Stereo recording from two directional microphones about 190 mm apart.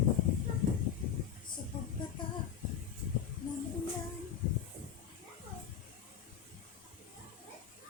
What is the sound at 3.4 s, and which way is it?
Music, 45° left (ahead or behind).